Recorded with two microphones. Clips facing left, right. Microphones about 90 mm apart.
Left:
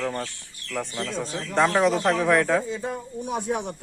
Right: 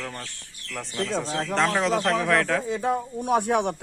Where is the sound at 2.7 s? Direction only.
65° right (ahead or behind).